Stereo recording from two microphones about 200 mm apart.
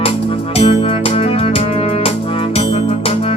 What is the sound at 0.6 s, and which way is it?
Music, 30° left (ahead or behind).